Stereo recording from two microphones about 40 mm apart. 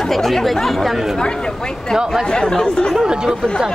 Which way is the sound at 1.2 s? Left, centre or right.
Centre.